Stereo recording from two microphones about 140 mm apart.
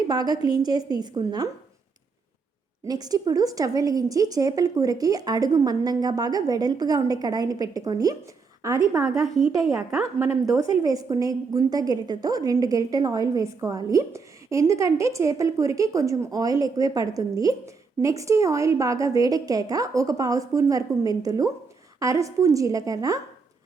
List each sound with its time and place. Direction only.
0.1 s a woman's voice: 30° right (ahead or behind)
2.8 s a woman's voice: 25° right (ahead or behind)
9.2 s a woman's voice: centre (ahead or behind)
10.5 s a woman's voice: 25° right (ahead or behind)